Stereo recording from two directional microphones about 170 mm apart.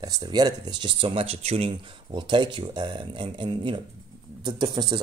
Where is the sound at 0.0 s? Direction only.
25° right (ahead or behind).